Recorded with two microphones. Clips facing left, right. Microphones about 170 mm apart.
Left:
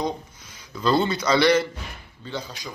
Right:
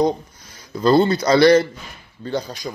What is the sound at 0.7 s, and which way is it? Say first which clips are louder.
A man's voice: right 7 dB; 40° right (ahead or behind).